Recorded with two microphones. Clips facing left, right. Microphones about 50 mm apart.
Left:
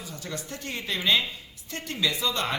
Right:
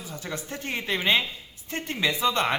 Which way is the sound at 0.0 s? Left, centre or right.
Right.